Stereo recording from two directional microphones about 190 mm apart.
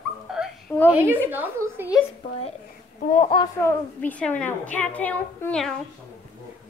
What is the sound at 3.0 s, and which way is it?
Speech, 40° left (ahead or behind).